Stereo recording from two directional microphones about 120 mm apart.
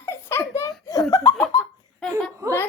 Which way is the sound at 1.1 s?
25° left (ahead or behind).